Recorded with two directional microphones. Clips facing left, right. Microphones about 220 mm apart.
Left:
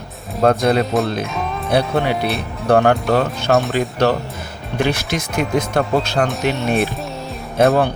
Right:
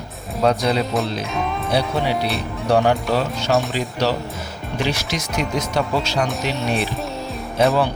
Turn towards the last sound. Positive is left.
turn(degrees=55)  # may be behind; listen again after turning